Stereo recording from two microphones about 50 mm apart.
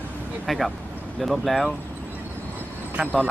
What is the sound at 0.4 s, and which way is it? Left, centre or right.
Speech, centre.